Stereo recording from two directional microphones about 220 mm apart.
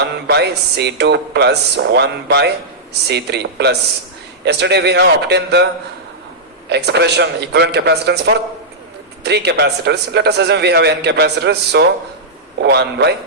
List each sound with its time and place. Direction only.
0.0 s a man's voice: 50° right (ahead or behind)
6.7 s a man's voice: 50° right (ahead or behind)